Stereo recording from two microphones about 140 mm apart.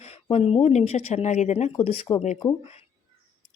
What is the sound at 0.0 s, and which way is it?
Speech, 50° left (ahead or behind).